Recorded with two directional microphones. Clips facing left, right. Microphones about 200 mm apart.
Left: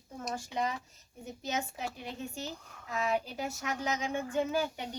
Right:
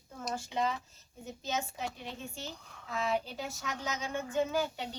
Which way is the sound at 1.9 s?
10° left (ahead or behind).